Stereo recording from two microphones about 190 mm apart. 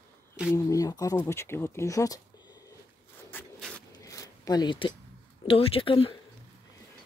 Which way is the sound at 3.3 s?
5° left (ahead or behind).